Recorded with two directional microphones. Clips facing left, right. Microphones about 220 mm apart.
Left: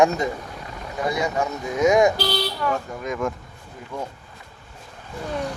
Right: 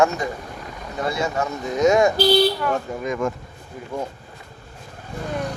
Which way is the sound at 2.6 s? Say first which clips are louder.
Right 2 dB; centre (ahead or behind).